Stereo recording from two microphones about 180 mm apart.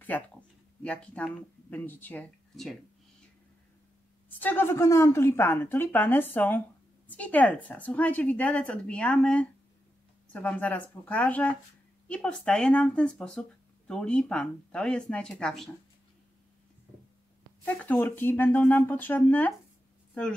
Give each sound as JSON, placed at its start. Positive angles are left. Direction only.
{"t": 0.8, "sound": "a woman's voice", "side_deg": 5}
{"t": 4.3, "sound": "a woman's voice", "side_deg": 10}
{"t": 17.6, "sound": "a woman's voice", "side_deg": 10}